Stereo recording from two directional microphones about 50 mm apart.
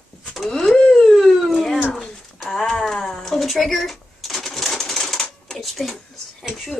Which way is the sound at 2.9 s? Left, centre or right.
Centre.